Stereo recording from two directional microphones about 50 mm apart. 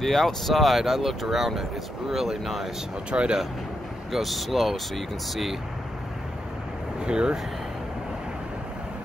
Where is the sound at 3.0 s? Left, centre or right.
Right.